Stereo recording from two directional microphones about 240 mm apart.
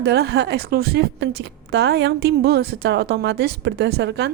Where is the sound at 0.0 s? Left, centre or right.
Right.